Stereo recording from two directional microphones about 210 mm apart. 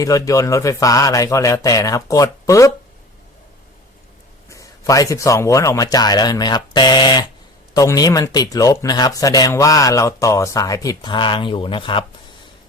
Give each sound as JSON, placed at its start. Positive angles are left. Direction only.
{"t": 0.0, "sound": "speech", "side_deg": 15}
{"t": 4.4, "sound": "speech", "side_deg": 15}